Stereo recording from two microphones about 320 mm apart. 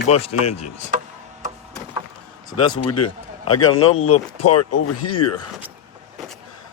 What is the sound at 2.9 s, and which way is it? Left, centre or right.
A man's voice, left.